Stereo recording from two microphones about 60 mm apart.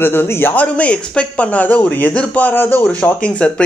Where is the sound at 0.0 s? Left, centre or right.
Left.